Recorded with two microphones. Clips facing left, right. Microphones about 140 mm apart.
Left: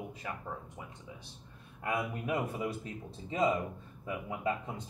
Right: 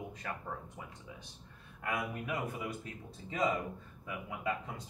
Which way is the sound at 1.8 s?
25° left (ahead or behind).